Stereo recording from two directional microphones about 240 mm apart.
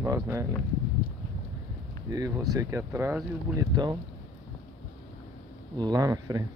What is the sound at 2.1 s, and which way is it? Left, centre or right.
Speech, centre.